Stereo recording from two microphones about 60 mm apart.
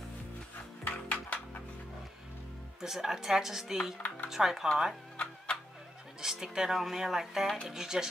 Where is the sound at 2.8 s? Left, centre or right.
Centre.